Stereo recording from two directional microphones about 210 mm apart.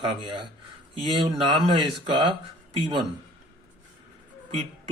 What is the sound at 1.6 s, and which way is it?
Speech, 25° right (ahead or behind).